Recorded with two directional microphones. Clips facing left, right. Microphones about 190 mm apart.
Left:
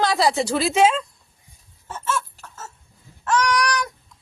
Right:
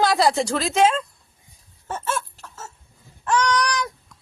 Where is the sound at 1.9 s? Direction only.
55° right (ahead or behind).